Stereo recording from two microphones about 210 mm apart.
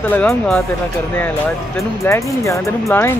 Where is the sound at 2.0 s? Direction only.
15° left (ahead or behind).